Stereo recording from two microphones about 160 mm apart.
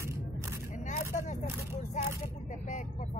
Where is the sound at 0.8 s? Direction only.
50° left (ahead or behind).